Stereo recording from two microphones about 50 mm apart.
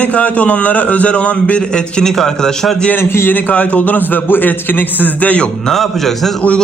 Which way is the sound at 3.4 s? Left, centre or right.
Left.